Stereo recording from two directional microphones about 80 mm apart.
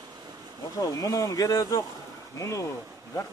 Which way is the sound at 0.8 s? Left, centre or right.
Left.